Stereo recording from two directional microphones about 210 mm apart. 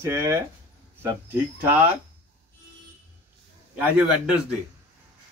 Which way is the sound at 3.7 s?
5° right (ahead or behind).